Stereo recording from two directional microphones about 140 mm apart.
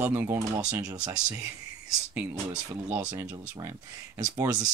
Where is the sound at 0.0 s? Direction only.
15° right (ahead or behind).